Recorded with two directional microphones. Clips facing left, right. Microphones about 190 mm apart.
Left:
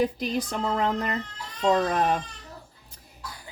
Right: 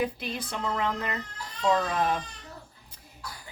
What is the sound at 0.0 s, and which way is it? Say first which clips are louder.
Speech: left 5 dB; 40° left (ahead or behind).